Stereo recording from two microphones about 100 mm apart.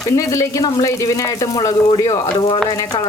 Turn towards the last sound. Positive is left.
turn(degrees=45)  # may be behind; listen again after turning